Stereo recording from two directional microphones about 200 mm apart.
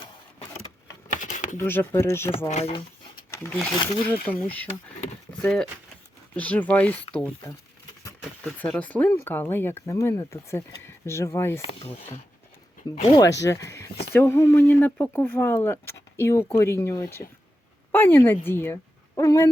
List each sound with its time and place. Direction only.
1.1 s a sound: 40° left (ahead or behind)
1.5 s speech: 10° left (ahead or behind)
2.5 s speech: 30° left (ahead or behind)
3.3 s speech: 10° left (ahead or behind)
8.6 s speech: 10° left (ahead or behind)
11.6 s speech: 30° left (ahead or behind)
13.0 s a woman's voice: 20° left (ahead or behind)